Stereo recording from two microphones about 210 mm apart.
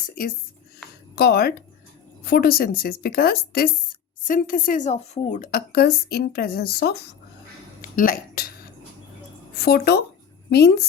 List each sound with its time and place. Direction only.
0.0 s speech: 40° left (ahead or behind)
9.6 s speech: 50° left (ahead or behind)